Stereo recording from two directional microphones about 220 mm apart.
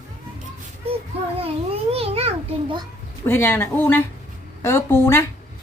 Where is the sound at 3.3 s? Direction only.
10° left (ahead or behind).